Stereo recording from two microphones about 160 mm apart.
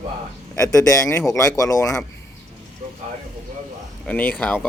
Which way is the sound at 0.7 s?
20° left (ahead or behind).